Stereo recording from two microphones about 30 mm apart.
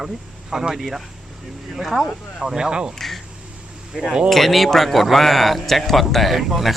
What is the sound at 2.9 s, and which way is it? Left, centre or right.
Speech, centre.